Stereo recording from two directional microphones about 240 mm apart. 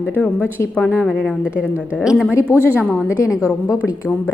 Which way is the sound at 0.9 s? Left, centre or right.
Centre.